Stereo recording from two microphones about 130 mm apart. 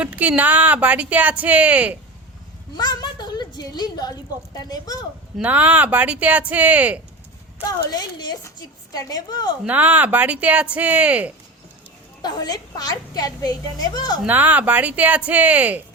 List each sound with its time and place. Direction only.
0.0 s speech: 10° right (ahead or behind)
2.7 s a woman's voice: 35° left (ahead or behind)
5.4 s speech: 15° right (ahead or behind)
8.2 s a woman's voice: 35° left (ahead or behind)
9.6 s speech: 15° right (ahead or behind)
12.2 s a woman's voice: 30° left (ahead or behind)
14.3 s speech: 15° right (ahead or behind)